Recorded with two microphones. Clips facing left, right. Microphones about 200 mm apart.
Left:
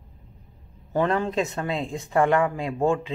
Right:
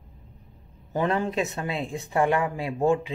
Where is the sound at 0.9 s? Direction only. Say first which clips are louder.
Left 2 dB; 15° right (ahead or behind).